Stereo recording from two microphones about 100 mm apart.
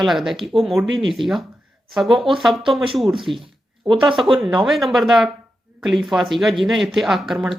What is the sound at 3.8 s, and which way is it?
Speech, 55° right (ahead or behind).